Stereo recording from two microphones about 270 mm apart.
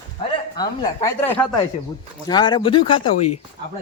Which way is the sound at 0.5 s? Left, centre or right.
Centre.